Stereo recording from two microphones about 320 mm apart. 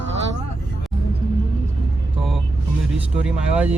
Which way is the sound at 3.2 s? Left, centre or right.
Centre.